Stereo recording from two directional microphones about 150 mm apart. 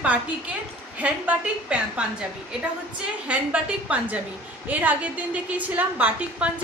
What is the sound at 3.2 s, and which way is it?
A woman's voice, 10° right (ahead or behind).